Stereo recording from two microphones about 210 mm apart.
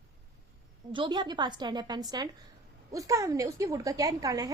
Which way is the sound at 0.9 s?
20° right (ahead or behind).